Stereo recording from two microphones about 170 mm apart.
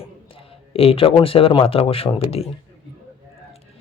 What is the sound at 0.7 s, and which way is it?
Speech, 35° left (ahead or behind).